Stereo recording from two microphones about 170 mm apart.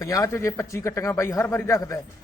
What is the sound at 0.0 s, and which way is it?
A man's voice, 20° left (ahead or behind).